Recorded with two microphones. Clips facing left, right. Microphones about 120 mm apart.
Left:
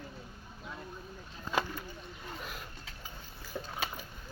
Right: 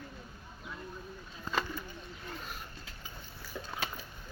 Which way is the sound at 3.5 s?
30° left (ahead or behind).